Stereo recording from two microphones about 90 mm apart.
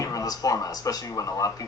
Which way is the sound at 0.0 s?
40° left (ahead or behind).